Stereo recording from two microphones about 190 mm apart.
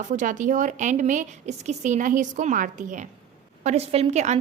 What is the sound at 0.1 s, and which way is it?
A woman's voice, 40° right (ahead or behind).